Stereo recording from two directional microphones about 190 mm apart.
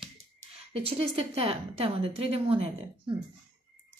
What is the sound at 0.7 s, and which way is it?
A woman's voice, 30° right (ahead or behind).